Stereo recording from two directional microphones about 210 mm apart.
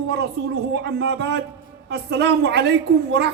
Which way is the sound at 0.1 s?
55° right (ahead or behind).